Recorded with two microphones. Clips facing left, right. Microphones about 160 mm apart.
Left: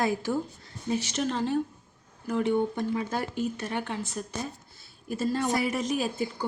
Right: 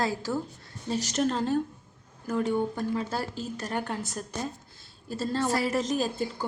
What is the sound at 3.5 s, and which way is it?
Speech, 40° right (ahead or behind).